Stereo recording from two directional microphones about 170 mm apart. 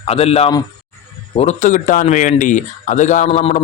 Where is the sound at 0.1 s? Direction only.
35° left (ahead or behind).